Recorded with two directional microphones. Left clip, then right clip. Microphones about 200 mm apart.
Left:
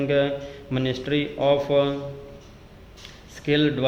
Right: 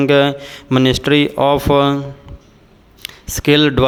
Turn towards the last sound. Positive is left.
turn(degrees=-40)  # may be behind; listen again after turning